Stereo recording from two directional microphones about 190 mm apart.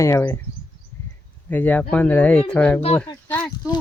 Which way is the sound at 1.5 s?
10° left (ahead or behind).